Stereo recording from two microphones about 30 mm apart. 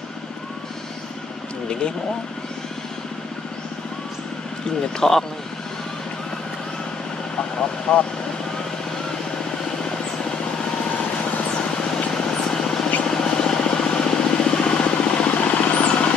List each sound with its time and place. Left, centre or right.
1.7 s speech: left
5.0 s speech: centre
7.9 s speech: left
11.7 s vehicle: centre
13.0 s a sound: left
14.0 s vehicle: left